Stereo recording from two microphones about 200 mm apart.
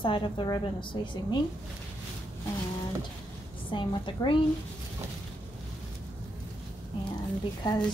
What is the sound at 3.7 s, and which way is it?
Speech, 25° left (ahead or behind).